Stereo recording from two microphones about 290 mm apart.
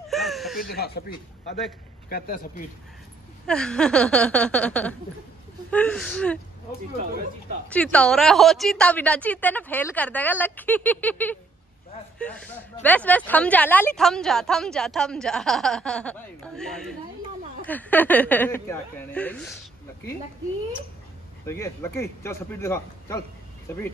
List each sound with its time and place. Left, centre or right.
0.1 s a sound: centre
0.6 s speech: left
3.4 s a woman's voice: centre
7.7 s a woman's voice: centre
12.8 s a woman's voice: centre
21.5 s a man's voice: centre